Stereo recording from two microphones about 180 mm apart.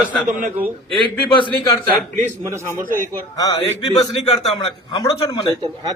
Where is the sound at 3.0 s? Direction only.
20° left (ahead or behind).